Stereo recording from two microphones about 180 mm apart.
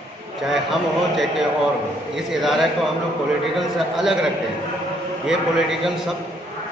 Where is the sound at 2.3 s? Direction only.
Centre (ahead or behind).